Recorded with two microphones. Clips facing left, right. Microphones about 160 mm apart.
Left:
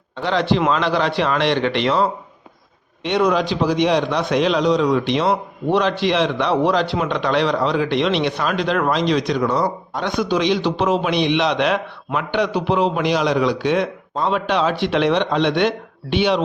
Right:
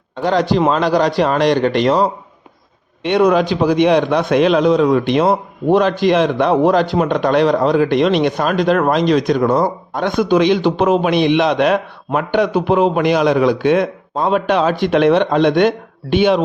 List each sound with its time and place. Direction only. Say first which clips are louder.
0.2 s a man's voice: right 4 dB; 45° right (ahead or behind)
3.0 s a man's voice: right 5 dB; 55° right (ahead or behind)